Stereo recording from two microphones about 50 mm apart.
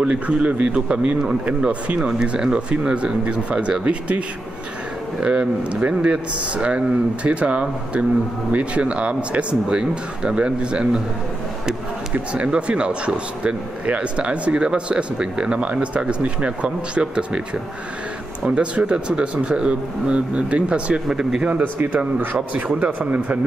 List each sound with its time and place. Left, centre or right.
0.0 s speech: right
2.0 s speech: centre
5.2 s speech: centre
12.4 s speech: right
18.5 s speech: right
21.1 s speech: centre
21.4 s speech: right